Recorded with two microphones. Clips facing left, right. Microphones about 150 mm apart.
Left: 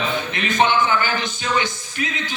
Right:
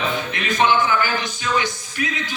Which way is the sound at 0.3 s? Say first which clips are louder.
Even; 25° left (ahead or behind).